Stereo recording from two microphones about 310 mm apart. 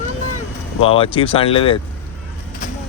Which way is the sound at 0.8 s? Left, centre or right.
Centre.